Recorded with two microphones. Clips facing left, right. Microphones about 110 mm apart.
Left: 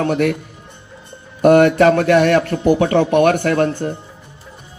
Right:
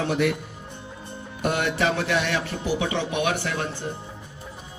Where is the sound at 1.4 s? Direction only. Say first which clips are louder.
Left 14 dB; 50° left (ahead or behind).